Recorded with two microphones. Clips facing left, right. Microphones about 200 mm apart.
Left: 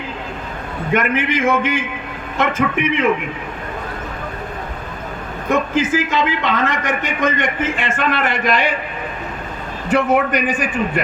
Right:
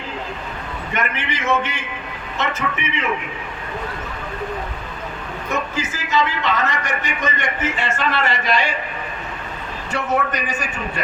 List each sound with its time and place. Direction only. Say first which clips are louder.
0.9 s a man's voice: left 8 dB; 50° left (ahead or behind)
5.5 s a man's voice: left 9 dB; 55° left (ahead or behind)
9.9 s a man's voice: left 6 dB; 55° left (ahead or behind)